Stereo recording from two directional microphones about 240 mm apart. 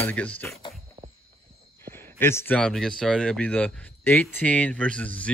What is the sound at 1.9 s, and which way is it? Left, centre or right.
Speech, centre.